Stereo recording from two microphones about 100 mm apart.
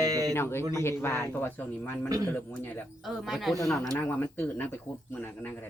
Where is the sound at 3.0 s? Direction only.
Centre (ahead or behind).